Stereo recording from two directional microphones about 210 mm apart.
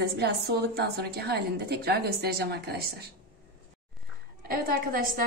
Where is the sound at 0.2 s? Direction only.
50° right (ahead or behind).